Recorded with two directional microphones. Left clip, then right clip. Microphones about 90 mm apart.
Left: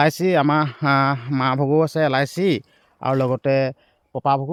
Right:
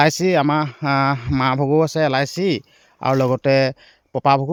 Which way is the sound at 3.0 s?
30° right (ahead or behind).